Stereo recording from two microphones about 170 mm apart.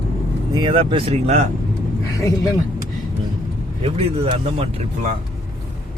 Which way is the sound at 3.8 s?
35° right (ahead or behind).